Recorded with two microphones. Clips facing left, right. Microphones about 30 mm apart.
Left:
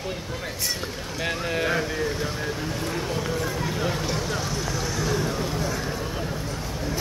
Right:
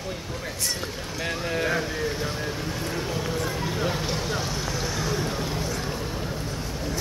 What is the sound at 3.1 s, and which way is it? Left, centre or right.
Run, centre.